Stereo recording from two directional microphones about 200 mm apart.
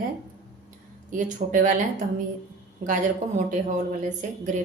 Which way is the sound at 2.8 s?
40° right (ahead or behind).